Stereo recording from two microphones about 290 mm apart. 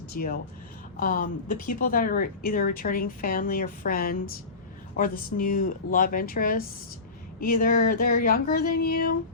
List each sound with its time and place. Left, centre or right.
0.1 s speech: left